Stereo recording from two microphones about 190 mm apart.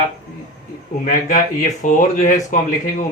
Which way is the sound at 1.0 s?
40° left (ahead or behind).